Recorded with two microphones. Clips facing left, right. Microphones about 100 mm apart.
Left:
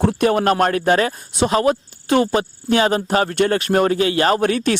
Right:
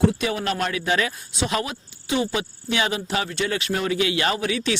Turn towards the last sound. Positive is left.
turn(degrees=50)  # may be behind; listen again after turning